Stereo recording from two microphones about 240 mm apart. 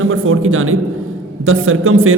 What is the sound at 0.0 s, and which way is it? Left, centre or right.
Speech, right.